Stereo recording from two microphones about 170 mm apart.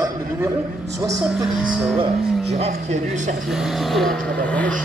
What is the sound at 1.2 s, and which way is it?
Speech, 5° right (ahead or behind).